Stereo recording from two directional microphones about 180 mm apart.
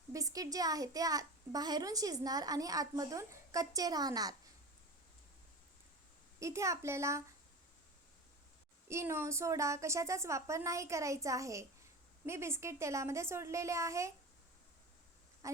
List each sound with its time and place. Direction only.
0.1 s a child's voice: 20° right (ahead or behind)
6.4 s a woman's voice: 15° right (ahead or behind)
8.9 s a woman's voice: 15° right (ahead or behind)
15.4 s speech: 20° right (ahead or behind)